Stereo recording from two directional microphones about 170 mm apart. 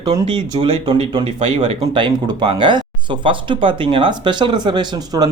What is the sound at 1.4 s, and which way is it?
Speech, 40° right (ahead or behind).